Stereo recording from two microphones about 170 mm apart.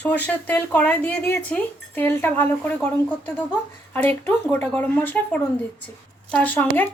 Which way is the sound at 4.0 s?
10° left (ahead or behind).